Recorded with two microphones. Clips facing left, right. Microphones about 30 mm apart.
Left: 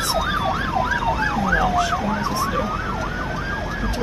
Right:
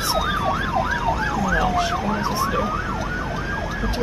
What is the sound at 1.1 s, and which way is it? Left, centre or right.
Ambulance, left.